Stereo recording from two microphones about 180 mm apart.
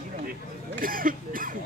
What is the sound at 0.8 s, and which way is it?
Speech, 50° right (ahead or behind).